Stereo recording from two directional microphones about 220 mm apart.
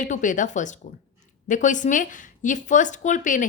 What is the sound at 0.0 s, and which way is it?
A woman's voice, 35° left (ahead or behind).